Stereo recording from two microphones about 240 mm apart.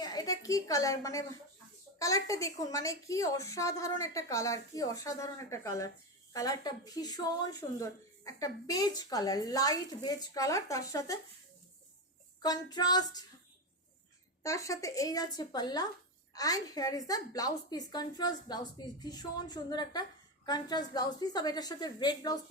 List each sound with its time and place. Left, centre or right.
0.0 s a woman's voice: centre
12.4 s a woman's voice: centre
14.4 s a woman's voice: centre